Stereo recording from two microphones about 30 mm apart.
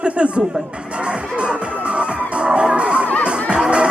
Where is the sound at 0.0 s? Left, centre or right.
Right.